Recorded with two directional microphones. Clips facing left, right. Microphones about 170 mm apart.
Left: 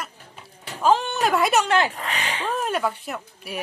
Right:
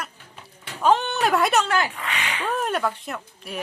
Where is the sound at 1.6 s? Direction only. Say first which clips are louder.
Left 3 dB; 25° left (ahead or behind).